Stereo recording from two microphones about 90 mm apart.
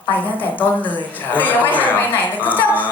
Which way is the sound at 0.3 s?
20° left (ahead or behind).